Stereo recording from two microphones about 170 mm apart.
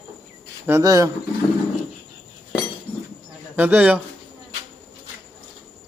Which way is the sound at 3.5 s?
10° right (ahead or behind).